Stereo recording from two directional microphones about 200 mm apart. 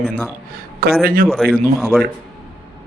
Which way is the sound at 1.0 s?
45° right (ahead or behind).